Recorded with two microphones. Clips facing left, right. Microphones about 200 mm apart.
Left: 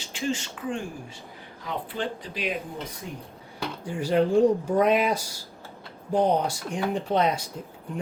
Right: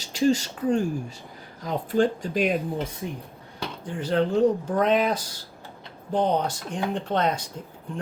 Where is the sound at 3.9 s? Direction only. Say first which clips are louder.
Left 1 dB; 10° left (ahead or behind).